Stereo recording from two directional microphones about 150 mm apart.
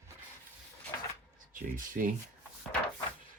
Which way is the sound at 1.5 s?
65° right (ahead or behind).